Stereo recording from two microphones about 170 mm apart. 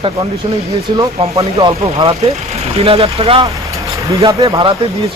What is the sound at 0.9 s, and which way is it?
Speech, 20° right (ahead or behind).